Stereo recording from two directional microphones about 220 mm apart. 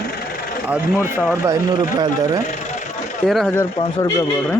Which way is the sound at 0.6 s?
10° right (ahead or behind).